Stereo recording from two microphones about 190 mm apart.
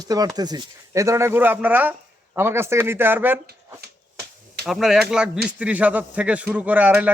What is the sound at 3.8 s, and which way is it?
Finger snapping, 55° right (ahead or behind).